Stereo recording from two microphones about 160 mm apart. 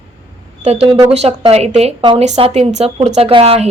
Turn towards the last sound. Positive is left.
turn(degrees=-35)  # may be behind; listen again after turning